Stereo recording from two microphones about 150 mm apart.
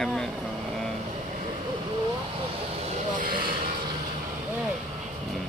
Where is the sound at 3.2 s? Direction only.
75° right (ahead or behind).